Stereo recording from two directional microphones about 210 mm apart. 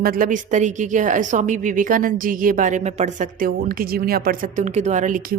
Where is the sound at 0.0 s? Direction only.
45° right (ahead or behind).